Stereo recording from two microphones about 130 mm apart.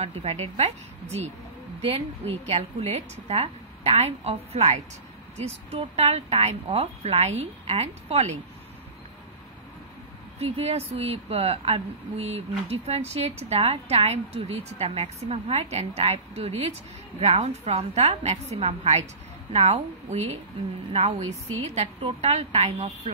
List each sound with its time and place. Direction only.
0.0 s a woman's voice: 55° right (ahead or behind)
1.8 s a woman's voice: 50° right (ahead or behind)
10.4 s a woman's voice: 50° right (ahead or behind)